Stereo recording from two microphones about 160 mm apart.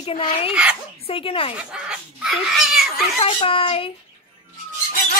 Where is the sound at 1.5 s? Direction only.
5° right (ahead or behind).